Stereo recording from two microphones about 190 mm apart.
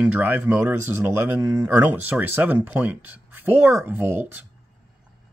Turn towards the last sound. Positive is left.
turn(degrees=-10)  # may be behind; listen again after turning